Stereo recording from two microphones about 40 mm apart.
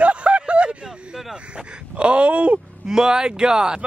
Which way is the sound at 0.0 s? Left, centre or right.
Right.